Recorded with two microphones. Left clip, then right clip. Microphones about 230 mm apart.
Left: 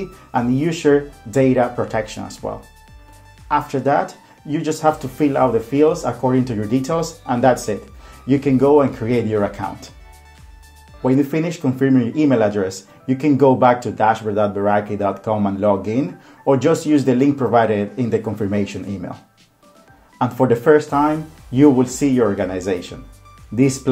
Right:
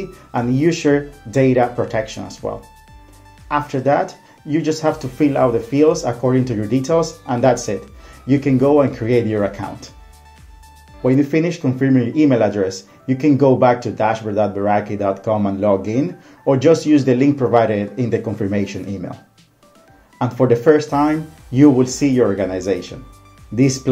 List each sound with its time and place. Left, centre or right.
0.3 s speech: centre
3.4 s speech: centre
11.0 s speech: centre
20.2 s speech: centre